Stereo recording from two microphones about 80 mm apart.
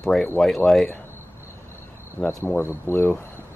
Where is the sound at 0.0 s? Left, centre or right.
Centre.